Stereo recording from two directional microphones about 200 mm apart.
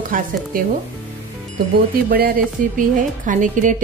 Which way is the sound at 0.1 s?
45° right (ahead or behind).